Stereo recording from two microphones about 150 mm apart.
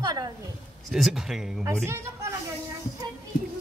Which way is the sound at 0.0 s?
25° right (ahead or behind).